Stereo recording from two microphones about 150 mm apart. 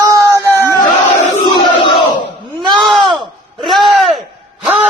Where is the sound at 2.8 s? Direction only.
Centre (ahead or behind).